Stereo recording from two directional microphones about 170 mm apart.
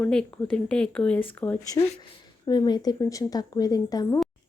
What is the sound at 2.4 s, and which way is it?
Speech, 25° left (ahead or behind).